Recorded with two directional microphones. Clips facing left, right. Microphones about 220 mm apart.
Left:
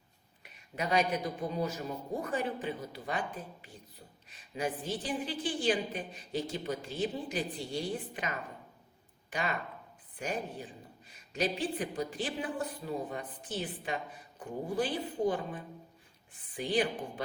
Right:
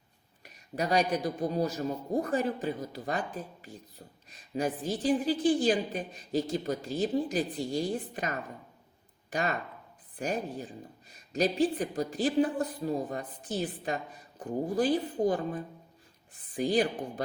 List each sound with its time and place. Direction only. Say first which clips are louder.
0.4 s a woman's voice: right 4 dB; 40° right (ahead or behind)